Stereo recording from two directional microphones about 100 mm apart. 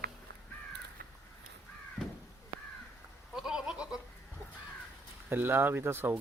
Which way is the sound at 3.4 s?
5° right (ahead or behind).